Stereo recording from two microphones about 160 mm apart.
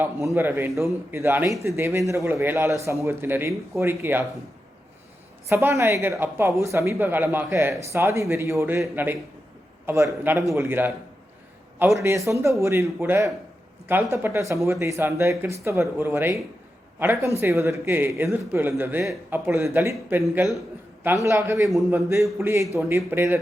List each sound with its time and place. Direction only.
0.0 s a woman's voice: 15° right (ahead or behind)
5.5 s a woman's voice: 15° right (ahead or behind)
9.8 s a woman's voice: 15° right (ahead or behind)
11.9 s a woman's voice: 20° right (ahead or behind)